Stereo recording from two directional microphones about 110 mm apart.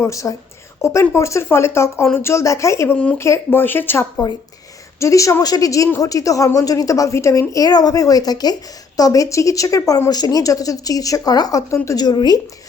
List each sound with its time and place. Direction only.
0.0 s a woman's voice: 30° left (ahead or behind)